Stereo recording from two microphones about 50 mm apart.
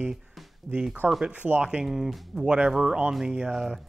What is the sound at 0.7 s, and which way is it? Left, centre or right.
Speech, right.